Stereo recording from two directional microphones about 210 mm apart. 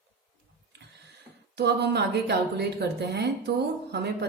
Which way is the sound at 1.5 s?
55° right (ahead or behind).